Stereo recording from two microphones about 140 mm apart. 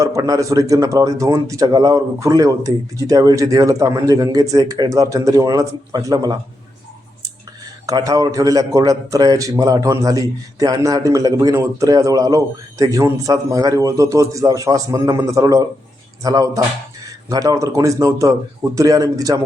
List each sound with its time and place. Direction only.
0.0 s a man's voice: 25° right (ahead or behind)
7.9 s a man's voice: 25° right (ahead or behind)